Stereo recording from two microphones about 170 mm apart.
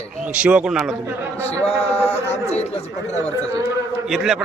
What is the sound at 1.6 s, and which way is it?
Speech, 35° left (ahead or behind).